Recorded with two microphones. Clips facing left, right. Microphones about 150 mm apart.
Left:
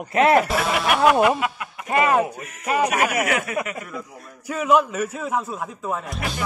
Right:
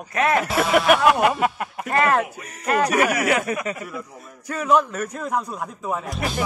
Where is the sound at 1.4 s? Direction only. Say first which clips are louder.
Right 4 dB; 40° right (ahead or behind).